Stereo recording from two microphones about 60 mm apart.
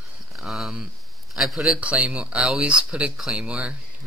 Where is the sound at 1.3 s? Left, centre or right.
Centre.